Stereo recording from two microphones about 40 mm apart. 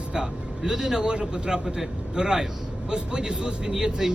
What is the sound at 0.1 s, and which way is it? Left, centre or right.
A man's voice, centre.